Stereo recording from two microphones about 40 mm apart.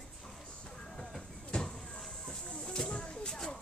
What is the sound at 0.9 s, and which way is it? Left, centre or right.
Vehicle, centre.